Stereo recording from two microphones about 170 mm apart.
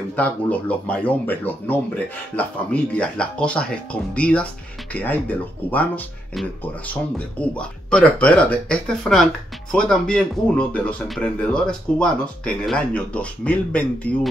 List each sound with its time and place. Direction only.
0.1 s speech: 10° left (ahead or behind)